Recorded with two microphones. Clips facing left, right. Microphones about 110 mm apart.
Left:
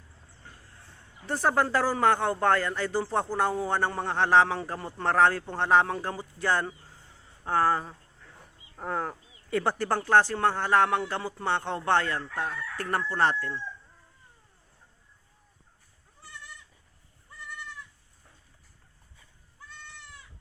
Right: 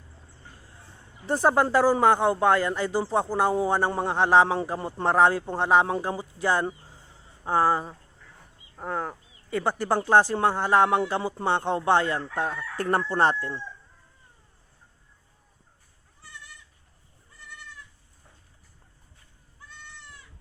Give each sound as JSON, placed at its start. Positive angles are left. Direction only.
{"t": 1.3, "sound": "speech", "side_deg": -15}
{"t": 8.7, "sound": "speech", "side_deg": 0}
{"t": 12.2, "sound": "crowing", "side_deg": -25}